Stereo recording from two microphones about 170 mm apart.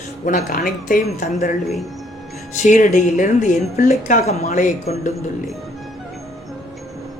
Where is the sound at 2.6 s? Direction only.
50° left (ahead or behind).